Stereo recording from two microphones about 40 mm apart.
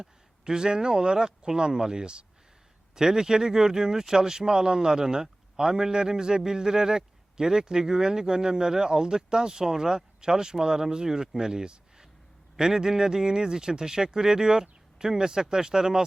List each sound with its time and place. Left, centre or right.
0.0 s speech: centre